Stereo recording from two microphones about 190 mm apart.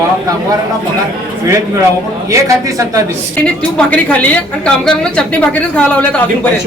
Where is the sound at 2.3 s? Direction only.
15° right (ahead or behind).